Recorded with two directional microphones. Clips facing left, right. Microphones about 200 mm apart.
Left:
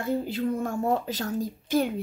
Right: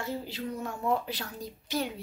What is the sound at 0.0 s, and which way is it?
A woman's voice, 50° left (ahead or behind).